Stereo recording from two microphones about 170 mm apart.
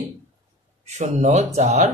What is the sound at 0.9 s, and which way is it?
Speech, 40° right (ahead or behind).